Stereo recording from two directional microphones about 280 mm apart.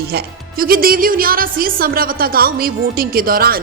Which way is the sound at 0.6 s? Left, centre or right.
Right.